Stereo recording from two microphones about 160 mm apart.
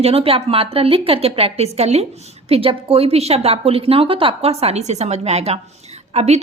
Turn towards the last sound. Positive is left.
turn(degrees=-45)  # may be behind; listen again after turning